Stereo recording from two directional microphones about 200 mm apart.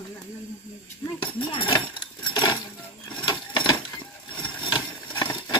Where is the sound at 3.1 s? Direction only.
25° left (ahead or behind).